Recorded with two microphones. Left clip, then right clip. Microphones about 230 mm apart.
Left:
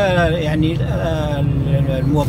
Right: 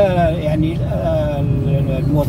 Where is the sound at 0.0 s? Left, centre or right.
Left.